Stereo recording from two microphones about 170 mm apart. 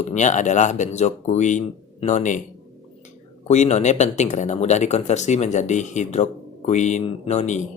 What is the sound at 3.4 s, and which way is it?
Speech, 45° left (ahead or behind).